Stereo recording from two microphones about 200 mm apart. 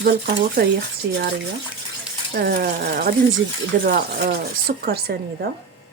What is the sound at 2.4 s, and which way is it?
Speech, 50° right (ahead or behind).